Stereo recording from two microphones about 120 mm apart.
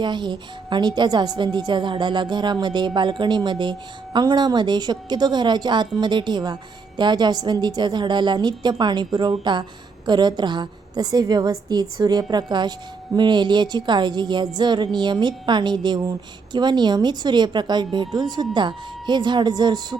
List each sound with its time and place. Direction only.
0.0 s a woman's voice: 40° right (ahead or behind)